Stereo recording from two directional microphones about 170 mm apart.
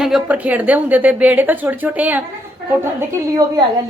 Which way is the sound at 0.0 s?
5° right (ahead or behind).